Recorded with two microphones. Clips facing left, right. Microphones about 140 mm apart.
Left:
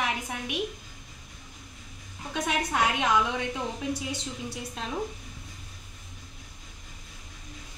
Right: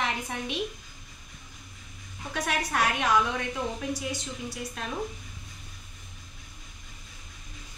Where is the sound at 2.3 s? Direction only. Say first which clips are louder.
Left 1 dB; 20° left (ahead or behind).